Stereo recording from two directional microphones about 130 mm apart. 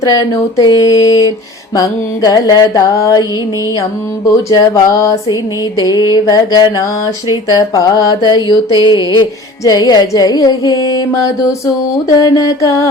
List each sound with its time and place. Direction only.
0.0 s music: 30° left (ahead or behind)
4.3 s music: 25° left (ahead or behind)
8.7 s speech: 35° left (ahead or behind)
9.6 s music: 30° left (ahead or behind)